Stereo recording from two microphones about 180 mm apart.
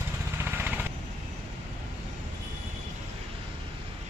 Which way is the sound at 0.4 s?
10° right (ahead or behind).